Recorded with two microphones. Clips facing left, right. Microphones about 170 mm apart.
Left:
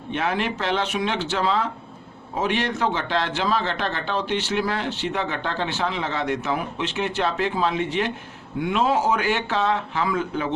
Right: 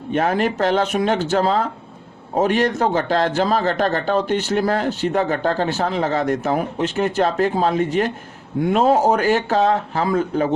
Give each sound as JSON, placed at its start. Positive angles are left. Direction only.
{"t": 0.1, "sound": "a man's voice", "side_deg": -45}